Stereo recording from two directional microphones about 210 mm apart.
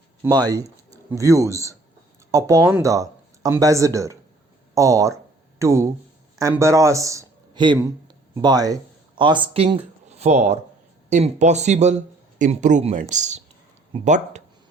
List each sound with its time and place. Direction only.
0.2 s speech: 15° right (ahead or behind)
4.7 s a sound: 15° right (ahead or behind)
6.4 s speech: 15° right (ahead or behind); by 14.4 s 35° right (ahead or behind)